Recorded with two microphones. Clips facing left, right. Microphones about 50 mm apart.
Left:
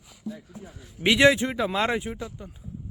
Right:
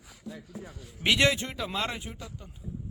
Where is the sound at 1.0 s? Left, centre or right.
Centre.